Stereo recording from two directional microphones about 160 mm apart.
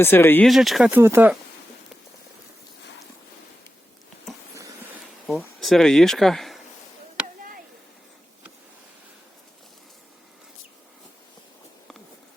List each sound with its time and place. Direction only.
0.0 s speech: 15° left (ahead or behind)
0.4 s speech: centre (ahead or behind)
0.9 s speech: 15° right (ahead or behind)
4.5 s a sound: 20° right (ahead or behind)
5.5 s speech: centre (ahead or behind)